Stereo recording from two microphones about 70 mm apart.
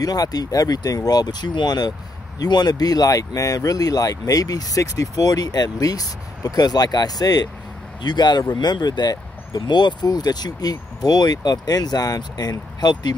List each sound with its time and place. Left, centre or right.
0.0 s speech: left
8.0 s speech: left
9.7 s speech: left